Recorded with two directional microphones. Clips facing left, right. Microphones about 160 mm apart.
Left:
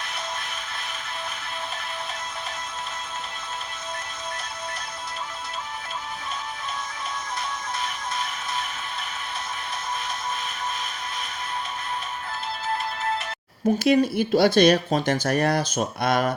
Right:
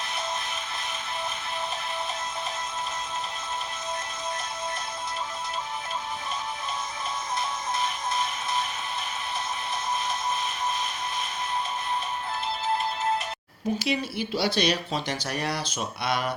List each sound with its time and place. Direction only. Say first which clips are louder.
13.7 s speech: left 11 dB; 50° left (ahead or behind)